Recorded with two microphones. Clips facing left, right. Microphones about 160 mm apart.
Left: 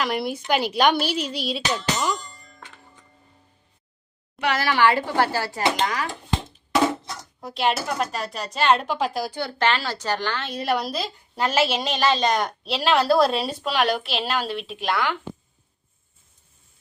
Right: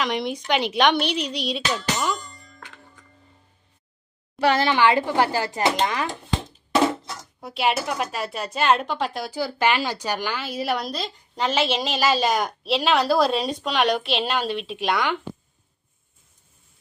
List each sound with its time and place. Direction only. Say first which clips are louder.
0.0 s speech: even; 5° left (ahead or behind)
4.4 s speech: right 2 dB; 30° right (ahead or behind)
7.4 s speech: even; centre (ahead or behind)